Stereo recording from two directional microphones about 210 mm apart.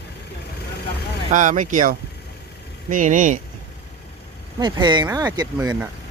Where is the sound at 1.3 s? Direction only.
35° right (ahead or behind).